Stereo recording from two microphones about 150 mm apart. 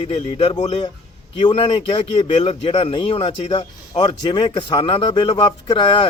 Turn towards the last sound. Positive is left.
turn(degrees=35)  # may be behind; listen again after turning